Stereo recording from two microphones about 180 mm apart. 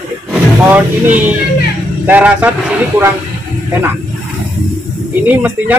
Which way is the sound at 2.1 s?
10° right (ahead or behind).